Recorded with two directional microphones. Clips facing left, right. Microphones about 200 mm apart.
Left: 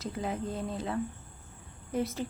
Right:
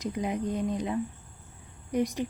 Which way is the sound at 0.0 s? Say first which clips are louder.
Right 4 dB; 15° right (ahead or behind).